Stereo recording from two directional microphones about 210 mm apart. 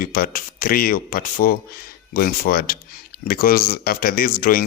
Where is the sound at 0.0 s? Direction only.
45° left (ahead or behind).